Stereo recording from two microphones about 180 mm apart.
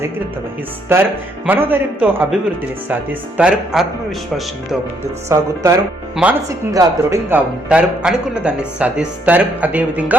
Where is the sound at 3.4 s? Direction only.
5° right (ahead or behind).